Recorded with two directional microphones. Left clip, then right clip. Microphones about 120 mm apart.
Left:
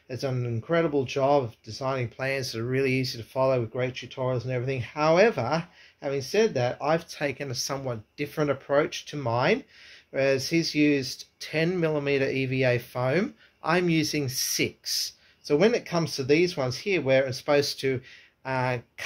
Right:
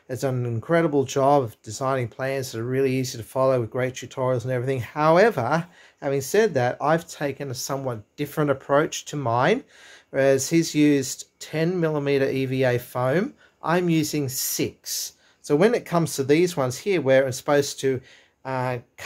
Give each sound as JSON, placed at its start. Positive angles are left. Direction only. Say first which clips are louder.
{"t": 0.2, "sound": "speech", "louder": "right 4 dB", "side_deg": -45}
{"t": 3.0, "sound": "speech", "louder": "right 3 dB", "side_deg": -50}
{"t": 4.6, "sound": "speech", "louder": "right 4 dB", "side_deg": -35}
{"t": 6.1, "sound": "speech", "louder": "right 4 dB", "side_deg": -50}
{"t": 7.2, "sound": "speech", "louder": "right 1 dB", "side_deg": -25}
{"t": 11.4, "sound": "speech", "louder": "right 2 dB", "side_deg": -30}
{"t": 18.4, "sound": "speech", "louder": "right 1 dB", "side_deg": -20}